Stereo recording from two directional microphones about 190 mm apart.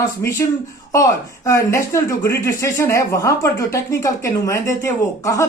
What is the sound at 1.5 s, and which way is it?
Speech, 15° left (ahead or behind).